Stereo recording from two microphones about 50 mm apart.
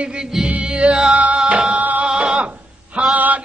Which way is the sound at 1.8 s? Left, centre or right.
Right.